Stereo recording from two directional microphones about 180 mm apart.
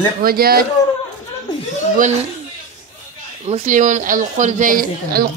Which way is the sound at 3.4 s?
40° right (ahead or behind).